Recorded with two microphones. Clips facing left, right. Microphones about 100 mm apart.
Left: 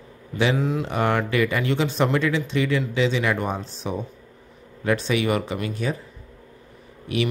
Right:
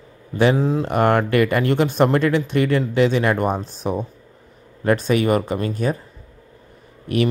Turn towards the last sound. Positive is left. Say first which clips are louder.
# right 5 dB
turn(degrees=-50)  # may be behind; listen again after turning